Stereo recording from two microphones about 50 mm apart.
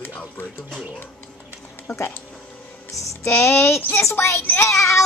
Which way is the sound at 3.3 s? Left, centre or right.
Left.